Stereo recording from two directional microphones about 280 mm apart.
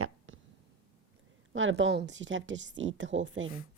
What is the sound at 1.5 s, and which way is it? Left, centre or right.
Speech, right.